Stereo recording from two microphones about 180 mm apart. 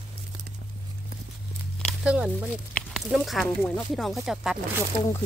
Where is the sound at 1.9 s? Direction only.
5° right (ahead or behind).